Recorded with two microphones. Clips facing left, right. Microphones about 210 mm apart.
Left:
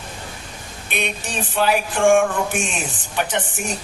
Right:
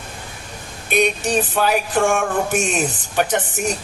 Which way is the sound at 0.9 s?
40° right (ahead or behind).